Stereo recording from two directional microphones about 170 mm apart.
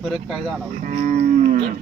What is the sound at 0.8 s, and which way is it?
Livestock, 50° right (ahead or behind).